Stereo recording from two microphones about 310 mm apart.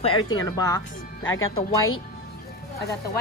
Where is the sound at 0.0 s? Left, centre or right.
Centre.